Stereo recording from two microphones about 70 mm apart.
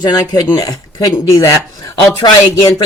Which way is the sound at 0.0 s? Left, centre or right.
Left.